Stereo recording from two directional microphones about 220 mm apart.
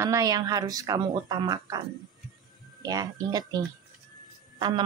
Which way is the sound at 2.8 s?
15° right (ahead or behind).